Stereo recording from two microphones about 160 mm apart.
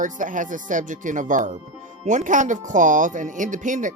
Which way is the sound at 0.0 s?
55° right (ahead or behind).